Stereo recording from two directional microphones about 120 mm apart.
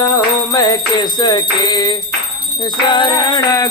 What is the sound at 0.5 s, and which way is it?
Music, 30° left (ahead or behind).